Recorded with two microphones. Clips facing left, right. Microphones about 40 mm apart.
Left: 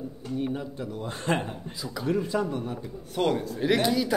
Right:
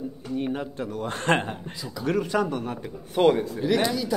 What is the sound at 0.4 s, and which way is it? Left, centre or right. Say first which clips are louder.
A man's voice: right 2 dB; right.